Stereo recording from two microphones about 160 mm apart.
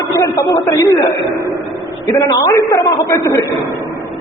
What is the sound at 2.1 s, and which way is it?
A man's voice, 20° left (ahead or behind).